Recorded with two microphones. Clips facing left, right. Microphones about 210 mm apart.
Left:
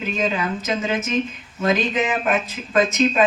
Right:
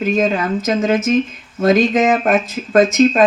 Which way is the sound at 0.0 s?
45° right (ahead or behind).